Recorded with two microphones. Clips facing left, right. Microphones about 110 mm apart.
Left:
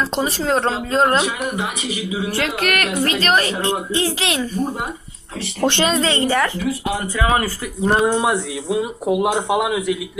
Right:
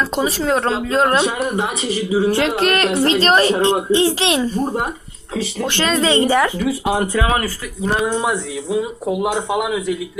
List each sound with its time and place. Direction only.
0.2 s speech: centre (ahead or behind)
1.9 s a woman's voice: 35° right (ahead or behind)
6.0 s speech: 15° right (ahead or behind)
7.9 s speech: 30° left (ahead or behind)
8.1 s speech: 15° left (ahead or behind)